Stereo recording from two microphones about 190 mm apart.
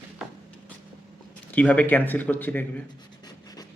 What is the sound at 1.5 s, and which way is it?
Speech, 10° left (ahead or behind).